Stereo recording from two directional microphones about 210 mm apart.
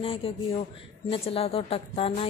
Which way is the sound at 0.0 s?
25° left (ahead or behind).